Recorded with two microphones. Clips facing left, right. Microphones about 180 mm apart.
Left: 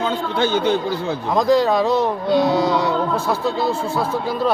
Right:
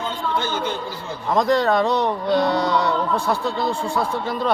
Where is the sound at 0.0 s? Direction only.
70° left (ahead or behind).